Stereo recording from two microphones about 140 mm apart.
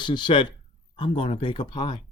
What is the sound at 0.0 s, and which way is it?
Speech, 35° left (ahead or behind).